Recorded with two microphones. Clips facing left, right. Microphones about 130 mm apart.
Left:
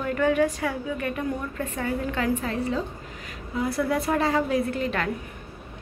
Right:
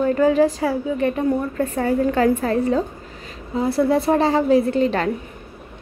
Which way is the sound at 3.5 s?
30° right (ahead or behind).